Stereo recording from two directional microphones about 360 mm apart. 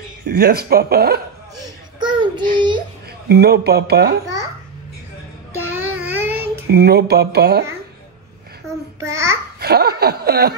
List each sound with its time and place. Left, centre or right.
0.2 s speech: right
1.6 s babbling: centre
3.3 s speech: right
5.6 s a sound: centre
6.7 s speech: right
8.6 s babbling: centre
9.6 s a sound: right